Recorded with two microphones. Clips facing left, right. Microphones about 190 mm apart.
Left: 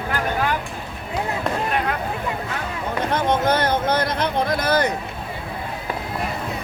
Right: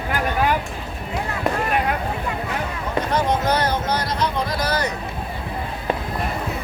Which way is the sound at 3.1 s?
55° left (ahead or behind).